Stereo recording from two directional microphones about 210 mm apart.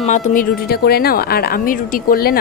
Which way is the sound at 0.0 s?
40° left (ahead or behind).